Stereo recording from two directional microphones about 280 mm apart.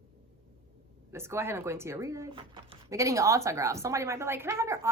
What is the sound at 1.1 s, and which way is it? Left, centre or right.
Speech, centre.